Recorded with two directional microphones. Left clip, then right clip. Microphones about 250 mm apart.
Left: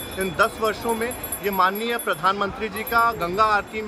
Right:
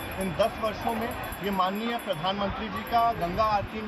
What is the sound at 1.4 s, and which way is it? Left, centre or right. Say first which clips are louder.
Speech: left 7 dB; centre.